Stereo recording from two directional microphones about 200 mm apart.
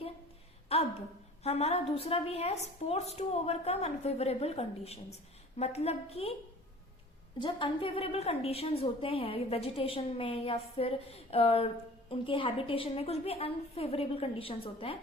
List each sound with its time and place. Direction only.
0.7 s a sound: 30° left (ahead or behind)
1.5 s a woman's voice: 30° left (ahead or behind)
7.3 s a woman's voice: 25° left (ahead or behind)